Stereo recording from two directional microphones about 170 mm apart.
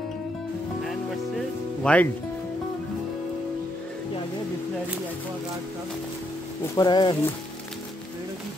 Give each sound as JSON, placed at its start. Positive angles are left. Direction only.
{"t": 1.8, "sound": "speech", "side_deg": 5}
{"t": 6.7, "sound": "speech", "side_deg": 25}